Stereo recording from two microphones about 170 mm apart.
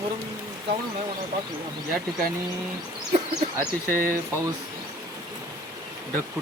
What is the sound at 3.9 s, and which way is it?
Speech, 55° right (ahead or behind).